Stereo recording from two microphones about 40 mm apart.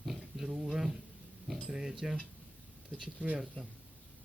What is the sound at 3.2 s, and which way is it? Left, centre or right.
Speech, right.